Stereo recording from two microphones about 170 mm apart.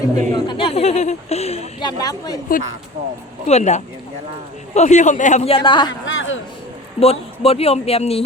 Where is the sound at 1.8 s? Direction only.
20° left (ahead or behind).